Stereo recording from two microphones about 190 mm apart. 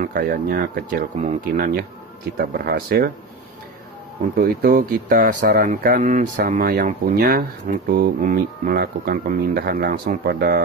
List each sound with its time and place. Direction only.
0.0 s speech: 50° right (ahead or behind)
4.4 s speech: 50° right (ahead or behind)